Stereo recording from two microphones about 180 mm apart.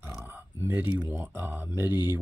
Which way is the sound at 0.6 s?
10° right (ahead or behind).